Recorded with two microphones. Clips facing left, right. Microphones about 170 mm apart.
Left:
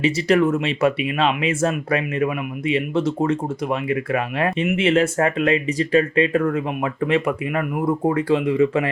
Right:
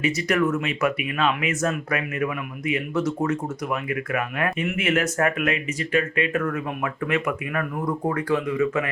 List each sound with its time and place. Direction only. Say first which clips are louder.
0.0 s speech: left 5 dB; 30° left (ahead or behind)